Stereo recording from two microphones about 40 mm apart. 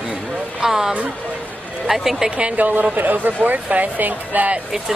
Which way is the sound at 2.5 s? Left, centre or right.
Right.